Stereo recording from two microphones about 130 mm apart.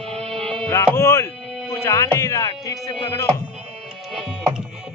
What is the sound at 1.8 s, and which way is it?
Music, 20° left (ahead or behind).